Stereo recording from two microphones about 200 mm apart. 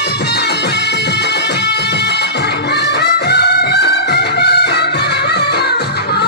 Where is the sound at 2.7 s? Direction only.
55° left (ahead or behind).